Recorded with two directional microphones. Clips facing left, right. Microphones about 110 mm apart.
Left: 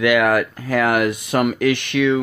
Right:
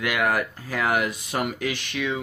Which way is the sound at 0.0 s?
90° left.